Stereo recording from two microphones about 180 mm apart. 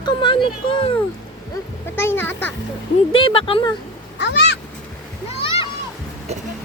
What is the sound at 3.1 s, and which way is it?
Speech, 30° left (ahead or behind).